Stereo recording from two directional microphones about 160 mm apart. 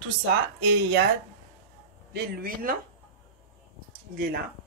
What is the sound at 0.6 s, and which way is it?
Speech, 90° right.